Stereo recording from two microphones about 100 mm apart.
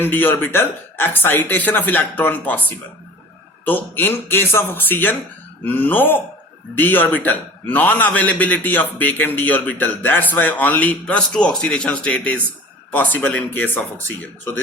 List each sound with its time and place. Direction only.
0.0 s speech: 20° left (ahead or behind)
3.7 s a man's voice: 20° left (ahead or behind)